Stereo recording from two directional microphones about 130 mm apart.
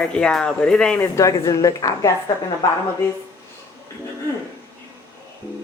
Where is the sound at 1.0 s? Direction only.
25° left (ahead or behind).